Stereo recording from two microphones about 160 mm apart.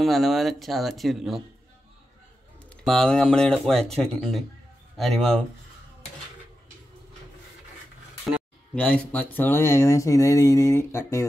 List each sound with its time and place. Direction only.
0.0 s speech: centre (ahead or behind)
2.8 s speech: 5° left (ahead or behind)
8.7 s speech: 10° left (ahead or behind)